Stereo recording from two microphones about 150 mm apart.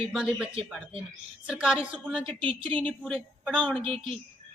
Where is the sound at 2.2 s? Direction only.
35° right (ahead or behind).